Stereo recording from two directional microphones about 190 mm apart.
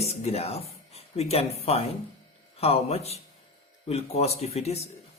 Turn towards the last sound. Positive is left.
turn(degrees=35)  # may be behind; listen again after turning